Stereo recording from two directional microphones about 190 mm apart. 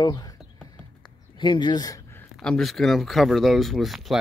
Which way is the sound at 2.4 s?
Centre (ahead or behind).